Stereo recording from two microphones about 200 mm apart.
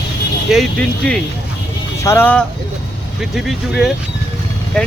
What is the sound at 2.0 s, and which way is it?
Speech, 10° left (ahead or behind).